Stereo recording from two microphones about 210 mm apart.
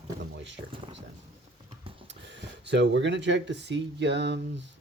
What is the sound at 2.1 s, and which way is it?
Speech, 55° right (ahead or behind).